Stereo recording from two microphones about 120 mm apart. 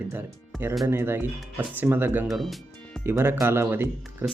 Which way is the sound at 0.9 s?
20° right (ahead or behind).